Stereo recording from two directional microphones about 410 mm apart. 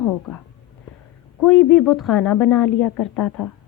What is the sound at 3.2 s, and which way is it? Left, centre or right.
Speech, left.